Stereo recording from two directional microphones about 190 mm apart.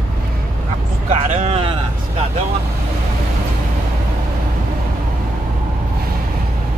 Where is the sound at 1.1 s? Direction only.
35° right (ahead or behind).